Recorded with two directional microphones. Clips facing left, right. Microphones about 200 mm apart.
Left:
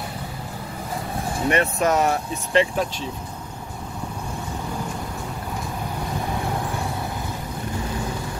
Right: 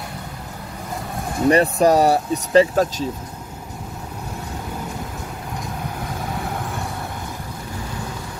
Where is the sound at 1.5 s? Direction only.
35° right (ahead or behind).